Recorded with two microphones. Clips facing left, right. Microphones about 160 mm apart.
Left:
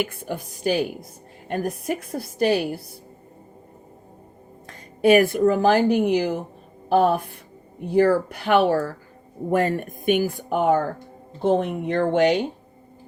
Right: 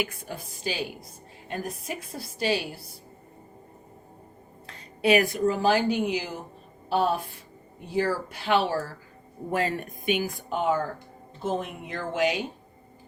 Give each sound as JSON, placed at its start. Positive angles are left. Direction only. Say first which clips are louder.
{"t": 0.6, "sound": "a woman's voice", "louder": "left 10 dB", "side_deg": 55}
{"t": 5.0, "sound": "a woman's voice", "louder": "left 6 dB", "side_deg": 50}
{"t": 10.3, "sound": "a woman's voice", "louder": "left 6 dB", "side_deg": 65}